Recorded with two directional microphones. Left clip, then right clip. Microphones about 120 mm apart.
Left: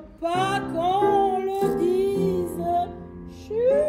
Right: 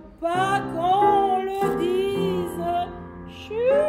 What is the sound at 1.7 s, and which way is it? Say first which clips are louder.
Music: left 1 dB; 55° right (ahead or behind).